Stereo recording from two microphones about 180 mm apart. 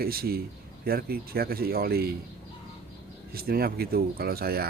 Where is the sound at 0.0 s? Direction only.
55° right (ahead or behind).